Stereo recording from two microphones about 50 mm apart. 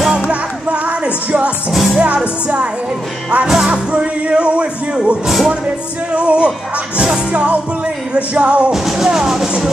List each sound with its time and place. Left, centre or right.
0.3 s music: right
1.7 s music: centre
2.0 s music: right
3.4 s speech: centre
6.1 s speech: right
8.1 s speech: right
8.7 s music: centre